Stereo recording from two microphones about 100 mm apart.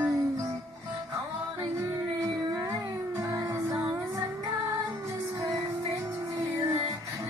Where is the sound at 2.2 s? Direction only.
35° right (ahead or behind).